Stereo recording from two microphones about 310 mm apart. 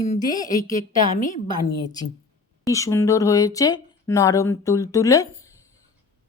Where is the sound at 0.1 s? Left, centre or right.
Centre.